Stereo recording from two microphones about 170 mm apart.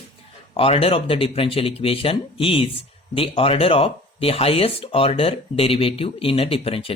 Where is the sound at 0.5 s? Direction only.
35° left (ahead or behind).